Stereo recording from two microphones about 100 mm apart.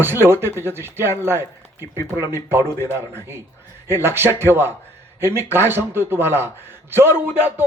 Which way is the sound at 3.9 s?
25° right (ahead or behind).